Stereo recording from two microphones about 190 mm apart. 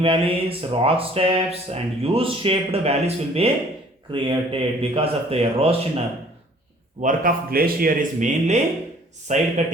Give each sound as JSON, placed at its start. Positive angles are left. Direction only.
{"t": 0.0, "sound": "speech", "side_deg": -30}
{"t": 7.0, "sound": "speech", "side_deg": -45}